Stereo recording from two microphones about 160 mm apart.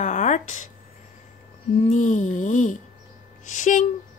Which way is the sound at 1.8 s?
50° left (ahead or behind).